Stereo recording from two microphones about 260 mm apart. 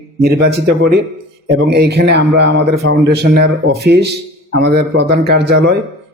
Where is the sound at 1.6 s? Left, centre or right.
Right.